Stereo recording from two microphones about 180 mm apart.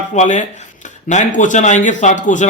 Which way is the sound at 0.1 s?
40° left (ahead or behind).